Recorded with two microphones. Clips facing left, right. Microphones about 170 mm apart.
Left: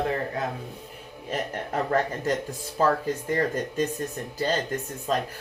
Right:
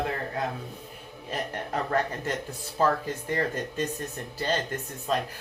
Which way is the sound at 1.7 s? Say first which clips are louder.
Left 3 dB; 40° left (ahead or behind).